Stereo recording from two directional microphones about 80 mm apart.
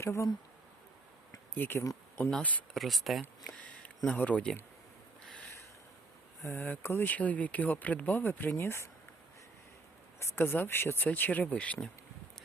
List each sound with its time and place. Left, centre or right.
0.0 s speech: left
1.5 s speech: left
2.7 s speech: centre
3.4 s a sound: centre
6.4 s speech: left
10.2 s speech: left; by 11.9 s centre